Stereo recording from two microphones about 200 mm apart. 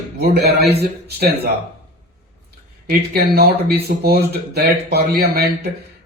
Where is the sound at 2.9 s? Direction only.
50° right (ahead or behind).